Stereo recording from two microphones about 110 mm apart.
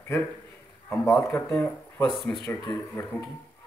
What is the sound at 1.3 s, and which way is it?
Speech, 10° left (ahead or behind).